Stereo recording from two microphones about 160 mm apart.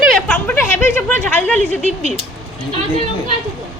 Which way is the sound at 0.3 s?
15° left (ahead or behind).